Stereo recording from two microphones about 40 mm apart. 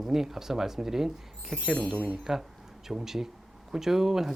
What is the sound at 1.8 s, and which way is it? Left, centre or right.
Speech, left.